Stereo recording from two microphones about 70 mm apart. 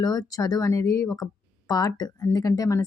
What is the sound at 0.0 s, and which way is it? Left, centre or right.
Speech, left.